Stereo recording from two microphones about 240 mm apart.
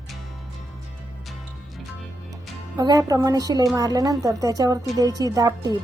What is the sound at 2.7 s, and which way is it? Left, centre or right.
A woman's voice, centre.